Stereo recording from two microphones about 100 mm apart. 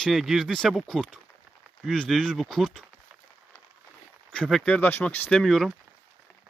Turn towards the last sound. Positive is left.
turn(degrees=0)  # may be behind; listen again after turning